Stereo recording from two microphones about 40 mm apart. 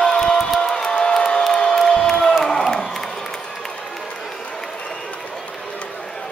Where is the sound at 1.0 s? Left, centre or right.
Centre.